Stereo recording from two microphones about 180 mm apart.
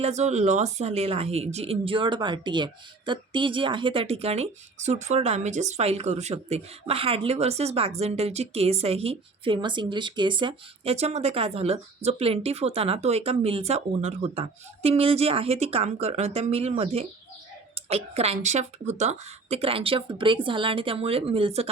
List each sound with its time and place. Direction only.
0.0 s a woman's voice: 40° right (ahead or behind)